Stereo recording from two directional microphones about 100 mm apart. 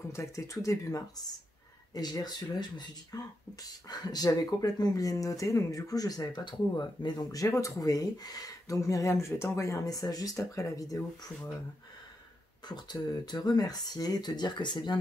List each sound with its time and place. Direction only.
0.1 s speech: 30° left (ahead or behind)
12.6 s speech: 45° left (ahead or behind)